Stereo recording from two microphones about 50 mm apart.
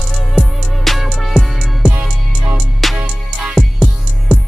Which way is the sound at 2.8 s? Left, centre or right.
Centre.